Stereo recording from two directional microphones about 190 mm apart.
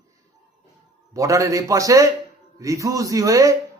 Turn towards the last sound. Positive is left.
turn(degrees=-15)  # may be behind; listen again after turning